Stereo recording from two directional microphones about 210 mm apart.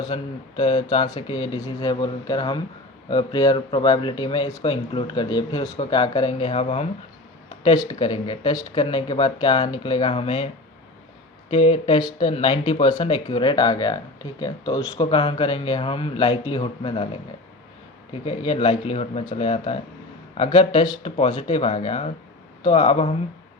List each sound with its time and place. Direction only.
0.0 s speech: 25° left (ahead or behind)
11.5 s speech: 25° left (ahead or behind)
18.3 s speech: 25° left (ahead or behind)